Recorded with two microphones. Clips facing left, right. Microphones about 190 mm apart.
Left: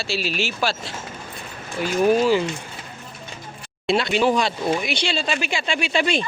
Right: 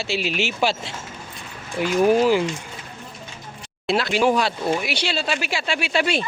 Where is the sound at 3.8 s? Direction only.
Centre (ahead or behind).